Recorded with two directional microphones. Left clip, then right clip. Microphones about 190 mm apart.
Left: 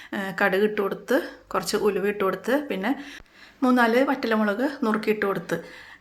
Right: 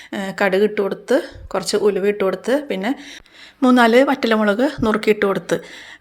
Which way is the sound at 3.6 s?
35° right (ahead or behind).